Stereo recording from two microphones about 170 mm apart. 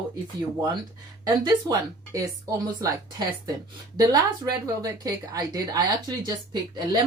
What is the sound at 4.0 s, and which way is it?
A woman's voice, 20° right (ahead or behind).